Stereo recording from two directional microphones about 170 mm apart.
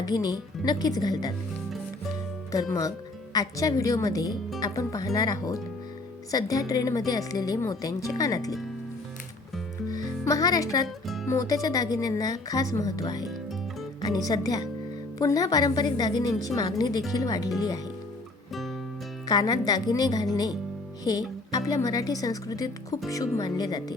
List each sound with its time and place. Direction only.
0.0 s a woman's voice: 25° left (ahead or behind)
2.5 s a woman's voice: 20° left (ahead or behind)
10.2 s a woman's voice: 20° left (ahead or behind)
10.8 s music: centre (ahead or behind)
11.3 s a woman's voice: 20° left (ahead or behind)
19.3 s a woman's voice: 20° left (ahead or behind)
21.0 s music: 20° left (ahead or behind)
21.7 s a woman's voice: 20° left (ahead or behind)